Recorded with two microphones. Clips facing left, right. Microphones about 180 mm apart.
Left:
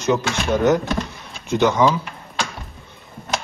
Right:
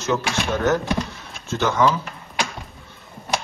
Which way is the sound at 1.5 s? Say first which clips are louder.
Left 3 dB; 15° left (ahead or behind).